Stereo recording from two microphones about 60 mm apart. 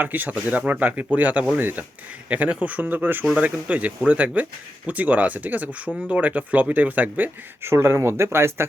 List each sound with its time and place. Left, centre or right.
0.0 s speech: right
7.6 s speech: right